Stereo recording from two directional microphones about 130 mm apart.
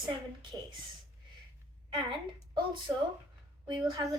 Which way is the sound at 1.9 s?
40° right (ahead or behind).